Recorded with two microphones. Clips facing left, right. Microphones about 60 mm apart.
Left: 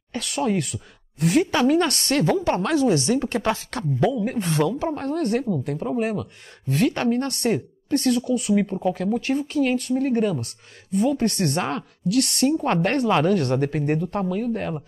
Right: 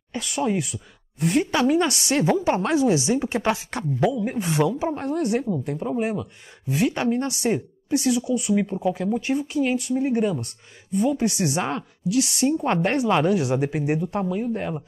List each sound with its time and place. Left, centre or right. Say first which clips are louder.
0.1 s speech: left 1 dB; centre
2.1 s a woman's voice: even; centre
4.0 s a woman's voice: left 1 dB; centre
5.7 s a woman's voice: left 1 dB; centre